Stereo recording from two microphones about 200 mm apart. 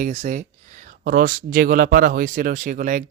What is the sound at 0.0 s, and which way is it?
Speech, 35° right (ahead or behind).